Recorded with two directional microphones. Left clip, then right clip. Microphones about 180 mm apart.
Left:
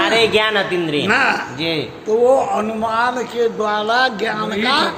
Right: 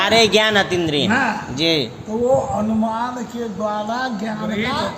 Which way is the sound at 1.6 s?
55° right (ahead or behind).